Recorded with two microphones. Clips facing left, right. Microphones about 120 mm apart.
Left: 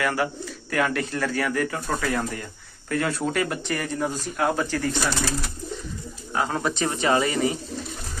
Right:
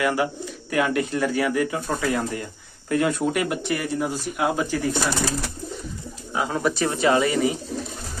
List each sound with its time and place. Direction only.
0.0 s speech: 15° right (ahead or behind)
6.3 s speech: 5° right (ahead or behind)